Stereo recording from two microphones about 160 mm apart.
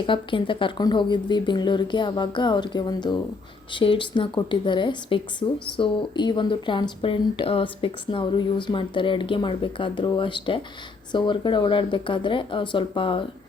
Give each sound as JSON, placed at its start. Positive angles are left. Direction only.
{"t": 0.0, "sound": "speech", "side_deg": 30}